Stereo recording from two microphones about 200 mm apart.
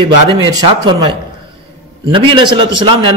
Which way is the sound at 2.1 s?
25° right (ahead or behind).